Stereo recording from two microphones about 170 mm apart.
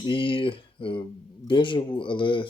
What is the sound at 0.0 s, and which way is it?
Speech, 30° left (ahead or behind).